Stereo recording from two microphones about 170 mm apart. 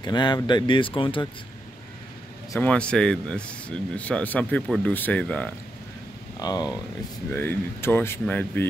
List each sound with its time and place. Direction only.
0.0 s speech: 25° left (ahead or behind)
2.5 s speech: 10° left (ahead or behind)
6.4 s speech: 25° left (ahead or behind)
7.3 s speech: 10° left (ahead or behind)